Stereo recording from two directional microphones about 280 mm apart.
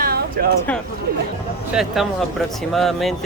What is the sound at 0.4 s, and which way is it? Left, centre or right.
Speech, right.